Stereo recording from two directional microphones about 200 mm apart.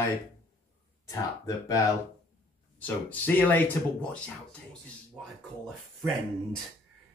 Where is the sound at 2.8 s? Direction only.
10° left (ahead or behind).